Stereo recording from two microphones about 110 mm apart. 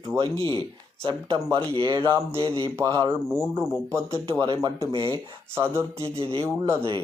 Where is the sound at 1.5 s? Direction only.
50° right (ahead or behind).